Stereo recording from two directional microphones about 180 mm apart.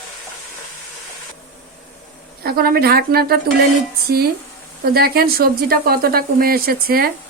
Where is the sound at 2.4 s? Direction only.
55° right (ahead or behind).